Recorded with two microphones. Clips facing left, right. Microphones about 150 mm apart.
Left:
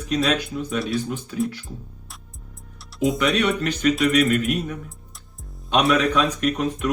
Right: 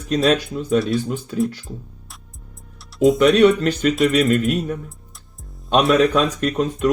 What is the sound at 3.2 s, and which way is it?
Speech, 35° right (ahead or behind).